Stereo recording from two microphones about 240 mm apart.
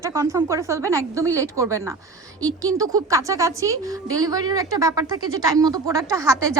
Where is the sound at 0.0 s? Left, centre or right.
Centre.